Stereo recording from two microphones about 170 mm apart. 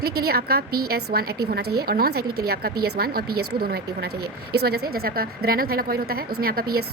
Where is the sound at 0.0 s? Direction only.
65° right (ahead or behind).